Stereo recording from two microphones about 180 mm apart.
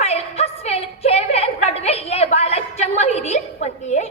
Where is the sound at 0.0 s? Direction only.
35° left (ahead or behind).